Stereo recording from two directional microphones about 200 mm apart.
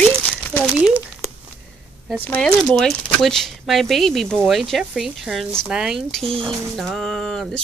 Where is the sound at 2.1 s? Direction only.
10° left (ahead or behind).